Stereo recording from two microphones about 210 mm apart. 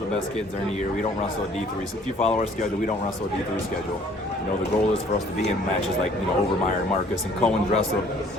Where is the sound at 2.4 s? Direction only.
40° left (ahead or behind).